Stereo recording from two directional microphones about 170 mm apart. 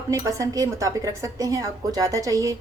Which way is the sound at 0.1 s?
20° right (ahead or behind).